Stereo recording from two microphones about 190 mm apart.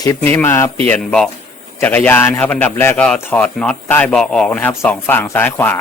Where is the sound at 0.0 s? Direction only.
15° left (ahead or behind).